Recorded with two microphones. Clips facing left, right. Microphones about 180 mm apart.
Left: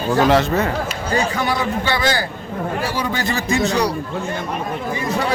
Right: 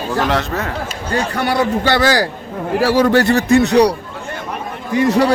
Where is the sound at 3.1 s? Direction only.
65° right (ahead or behind).